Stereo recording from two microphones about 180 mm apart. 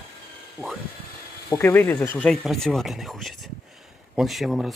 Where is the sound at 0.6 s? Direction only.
10° left (ahead or behind).